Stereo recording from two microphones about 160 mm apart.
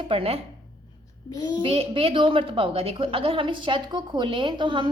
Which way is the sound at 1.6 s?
35° right (ahead or behind).